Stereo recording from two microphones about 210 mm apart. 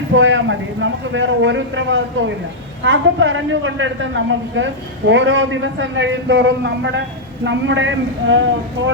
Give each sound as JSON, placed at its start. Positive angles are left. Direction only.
{"t": 0.1, "sound": "a woman's voice", "side_deg": -65}